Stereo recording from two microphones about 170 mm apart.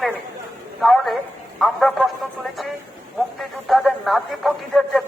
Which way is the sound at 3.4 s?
Centre (ahead or behind).